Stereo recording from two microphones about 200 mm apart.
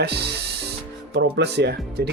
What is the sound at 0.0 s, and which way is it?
Speech, 55° right (ahead or behind).